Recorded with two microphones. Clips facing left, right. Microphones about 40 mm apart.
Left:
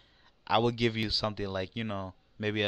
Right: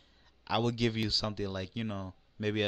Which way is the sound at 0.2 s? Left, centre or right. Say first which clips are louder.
Left 4 dB; centre.